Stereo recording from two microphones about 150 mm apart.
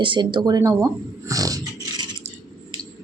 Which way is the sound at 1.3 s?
25° right (ahead or behind).